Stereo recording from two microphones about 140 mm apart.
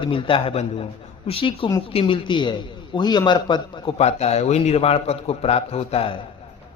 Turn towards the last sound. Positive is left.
turn(degrees=45)  # may be behind; listen again after turning